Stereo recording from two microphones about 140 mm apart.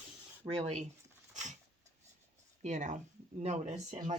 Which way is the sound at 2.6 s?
60° right (ahead or behind).